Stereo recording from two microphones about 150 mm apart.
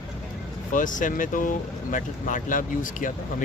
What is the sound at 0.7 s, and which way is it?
Speech, 60° left (ahead or behind).